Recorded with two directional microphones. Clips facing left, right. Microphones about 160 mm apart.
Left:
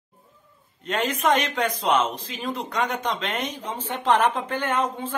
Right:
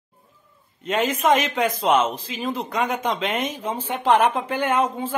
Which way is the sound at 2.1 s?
90° right.